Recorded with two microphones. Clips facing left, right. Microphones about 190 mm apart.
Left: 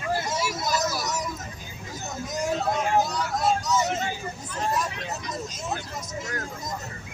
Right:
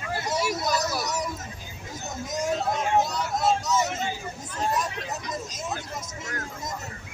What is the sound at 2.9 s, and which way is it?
Vehicle, 25° right (ahead or behind).